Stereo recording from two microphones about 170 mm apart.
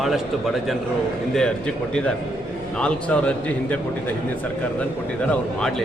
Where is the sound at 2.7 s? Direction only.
5° left (ahead or behind).